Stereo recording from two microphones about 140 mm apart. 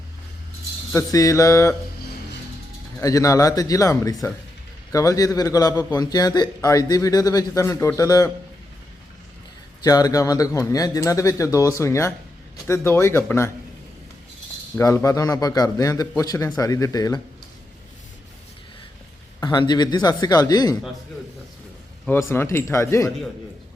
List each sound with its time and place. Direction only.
0.9 s a man's voice: 20° left (ahead or behind)
3.0 s a man's voice: 25° left (ahead or behind)
9.8 s a man's voice: 25° left (ahead or behind)
14.8 s a man's voice: 20° left (ahead or behind)
19.4 s a man's voice: 30° left (ahead or behind)
22.0 s a man's voice: 15° left (ahead or behind)